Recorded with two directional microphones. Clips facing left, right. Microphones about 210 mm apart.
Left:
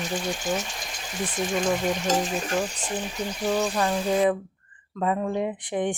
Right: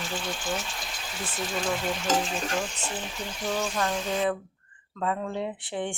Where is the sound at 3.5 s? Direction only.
40° left (ahead or behind).